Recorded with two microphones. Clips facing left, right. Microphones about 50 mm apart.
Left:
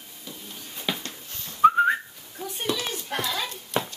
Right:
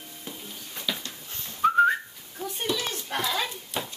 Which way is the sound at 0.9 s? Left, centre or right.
Left.